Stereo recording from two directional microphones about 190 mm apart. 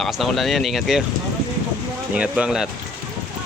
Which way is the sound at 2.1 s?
5° right (ahead or behind).